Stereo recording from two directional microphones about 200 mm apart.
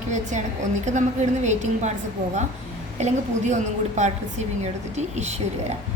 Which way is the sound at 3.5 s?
35° right (ahead or behind).